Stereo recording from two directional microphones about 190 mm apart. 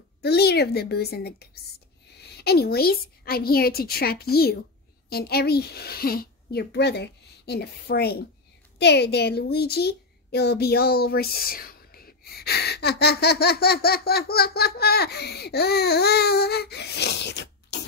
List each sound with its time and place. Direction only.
0.2 s a woman's voice: 60° left (ahead or behind)